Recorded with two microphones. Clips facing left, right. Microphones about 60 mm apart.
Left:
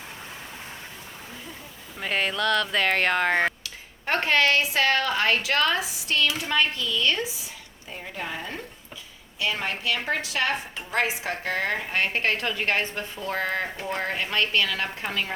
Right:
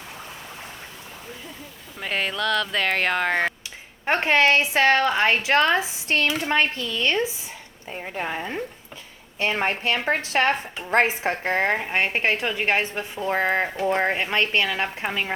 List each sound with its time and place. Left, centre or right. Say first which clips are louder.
2.0 s speech: even; centre
3.6 s speech: right 3 dB; right
9.4 s speech: right 4 dB; right